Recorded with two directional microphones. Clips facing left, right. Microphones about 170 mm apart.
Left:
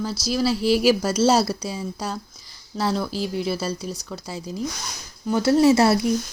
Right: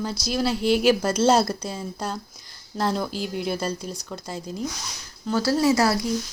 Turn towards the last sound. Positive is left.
turn(degrees=25)  # may be behind; listen again after turning